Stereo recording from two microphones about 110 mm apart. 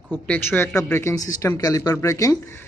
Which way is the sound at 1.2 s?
30° left (ahead or behind).